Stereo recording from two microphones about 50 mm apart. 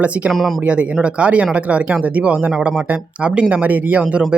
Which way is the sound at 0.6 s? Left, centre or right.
Right.